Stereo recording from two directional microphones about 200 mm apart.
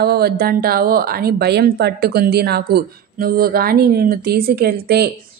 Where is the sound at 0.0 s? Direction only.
50° right (ahead or behind).